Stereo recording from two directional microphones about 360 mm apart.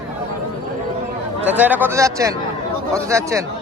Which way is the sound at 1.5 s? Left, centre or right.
Centre.